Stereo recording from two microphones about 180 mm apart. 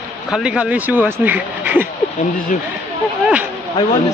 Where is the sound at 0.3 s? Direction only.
5° right (ahead or behind).